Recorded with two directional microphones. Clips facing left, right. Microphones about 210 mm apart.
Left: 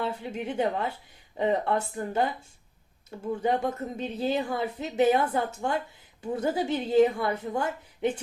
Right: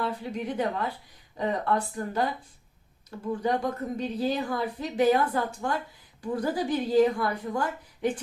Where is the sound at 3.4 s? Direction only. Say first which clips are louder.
Left 1 dB; 25° left (ahead or behind).